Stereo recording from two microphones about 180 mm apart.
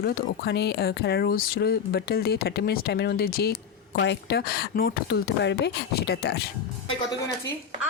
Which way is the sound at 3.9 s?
75° left (ahead or behind).